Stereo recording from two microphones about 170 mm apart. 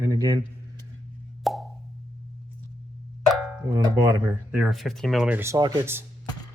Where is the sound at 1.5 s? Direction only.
Centre (ahead or behind).